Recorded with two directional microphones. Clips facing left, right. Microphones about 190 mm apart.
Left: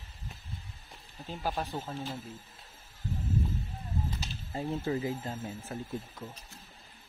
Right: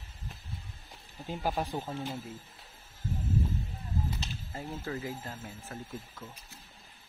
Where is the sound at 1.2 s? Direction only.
15° right (ahead or behind).